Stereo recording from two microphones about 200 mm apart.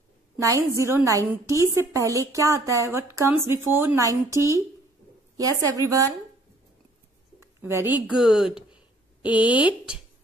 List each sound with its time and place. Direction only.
0.4 s a woman's voice: 15° right (ahead or behind)
7.6 s speech: 10° right (ahead or behind)